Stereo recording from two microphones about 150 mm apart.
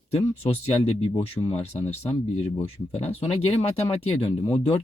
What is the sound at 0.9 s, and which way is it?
Speech, 40° left (ahead or behind).